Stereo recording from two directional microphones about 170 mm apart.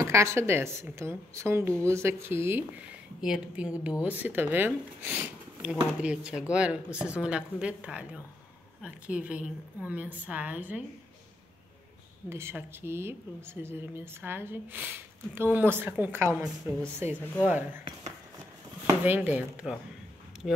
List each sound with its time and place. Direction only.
0.0 s a woman's voice: 15° right (ahead or behind)
12.3 s a woman's voice: 15° right (ahead or behind)
18.9 s a woman's voice: 10° right (ahead or behind)